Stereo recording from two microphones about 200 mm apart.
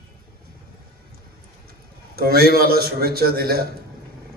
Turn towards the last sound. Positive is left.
turn(degrees=-50)  # may be behind; listen again after turning